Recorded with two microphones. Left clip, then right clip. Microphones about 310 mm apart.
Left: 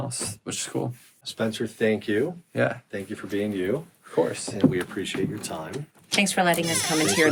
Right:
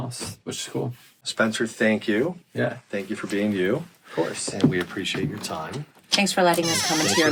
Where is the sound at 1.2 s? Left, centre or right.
Right.